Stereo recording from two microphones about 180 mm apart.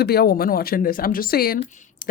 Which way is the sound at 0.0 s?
60° left (ahead or behind).